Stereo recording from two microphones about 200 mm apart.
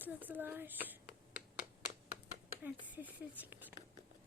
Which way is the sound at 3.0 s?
10° right (ahead or behind).